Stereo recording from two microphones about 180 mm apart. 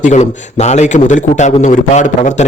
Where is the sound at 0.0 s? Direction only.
40° left (ahead or behind).